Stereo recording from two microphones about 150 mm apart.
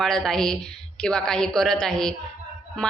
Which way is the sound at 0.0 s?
5° left (ahead or behind).